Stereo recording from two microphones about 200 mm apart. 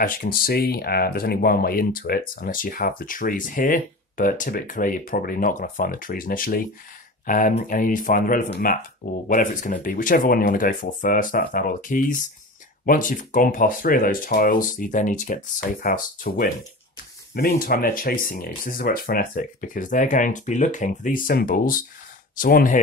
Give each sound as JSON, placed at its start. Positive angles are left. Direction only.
{"t": 0.0, "sound": "speech", "side_deg": 45}